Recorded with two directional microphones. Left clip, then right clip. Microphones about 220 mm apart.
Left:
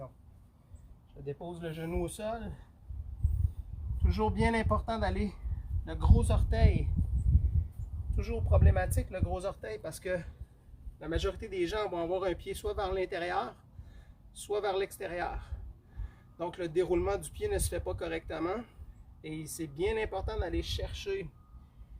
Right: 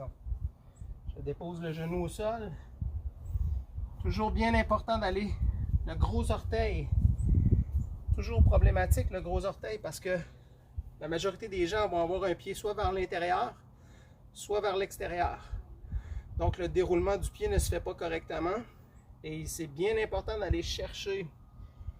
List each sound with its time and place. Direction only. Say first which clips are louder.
1.2 s speech: right 1 dB; 15° left (ahead or behind)
4.0 s speech: even; 20° left (ahead or behind)
8.1 s speech: right 1 dB; 10° left (ahead or behind)